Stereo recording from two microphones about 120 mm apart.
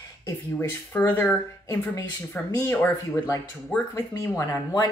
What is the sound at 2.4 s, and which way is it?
Speech, 25° left (ahead or behind).